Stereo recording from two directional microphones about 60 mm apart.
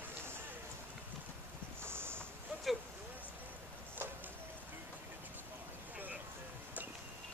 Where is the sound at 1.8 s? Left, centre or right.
Right.